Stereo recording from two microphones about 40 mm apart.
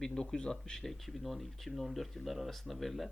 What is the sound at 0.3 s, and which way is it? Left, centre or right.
Speech, centre.